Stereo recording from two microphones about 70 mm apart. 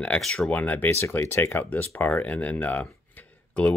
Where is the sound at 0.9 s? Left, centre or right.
Left.